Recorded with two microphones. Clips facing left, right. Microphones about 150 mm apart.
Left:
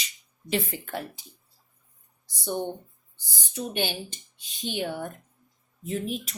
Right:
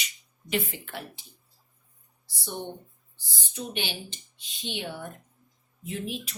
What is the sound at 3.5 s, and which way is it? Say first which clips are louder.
Speech: left 4 dB; 45° left (ahead or behind).